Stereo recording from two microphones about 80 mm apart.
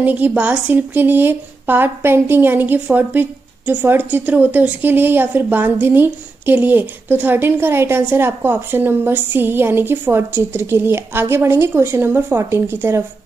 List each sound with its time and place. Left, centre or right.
0.0 s a woman's voice: centre